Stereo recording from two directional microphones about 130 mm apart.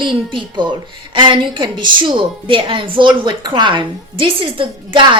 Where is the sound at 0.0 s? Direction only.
35° right (ahead or behind).